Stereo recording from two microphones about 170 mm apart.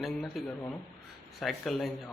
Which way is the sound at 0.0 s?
Centre (ahead or behind).